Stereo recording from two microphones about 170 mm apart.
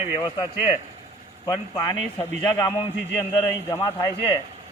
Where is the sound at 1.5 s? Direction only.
20° left (ahead or behind).